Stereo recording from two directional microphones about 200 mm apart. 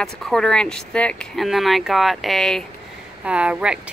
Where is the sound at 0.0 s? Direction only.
5° left (ahead or behind).